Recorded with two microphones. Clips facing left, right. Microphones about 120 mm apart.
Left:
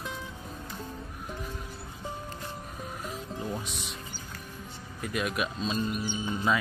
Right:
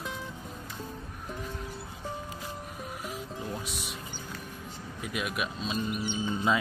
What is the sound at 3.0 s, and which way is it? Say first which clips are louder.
Music: left 2 dB; centre (ahead or behind).